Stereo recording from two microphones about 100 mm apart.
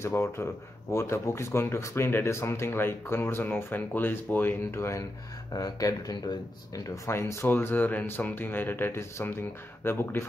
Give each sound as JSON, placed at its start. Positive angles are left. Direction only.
{"t": 0.0, "sound": "speech", "side_deg": 25}
{"t": 7.1, "sound": "speech", "side_deg": 25}